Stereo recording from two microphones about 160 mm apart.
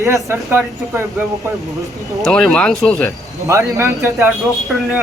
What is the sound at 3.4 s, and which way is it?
Speech, 20° right (ahead or behind).